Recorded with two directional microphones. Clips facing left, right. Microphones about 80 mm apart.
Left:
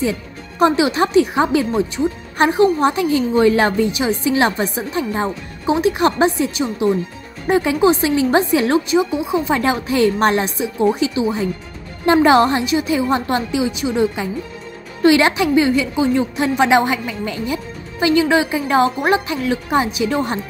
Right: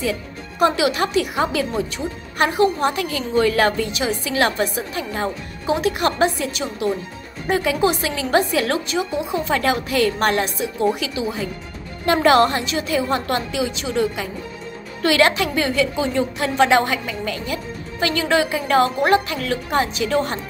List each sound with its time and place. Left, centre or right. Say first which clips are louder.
0.6 s speech: left 3 dB; left